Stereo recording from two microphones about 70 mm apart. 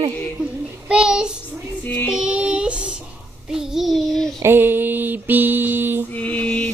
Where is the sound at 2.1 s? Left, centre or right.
Centre.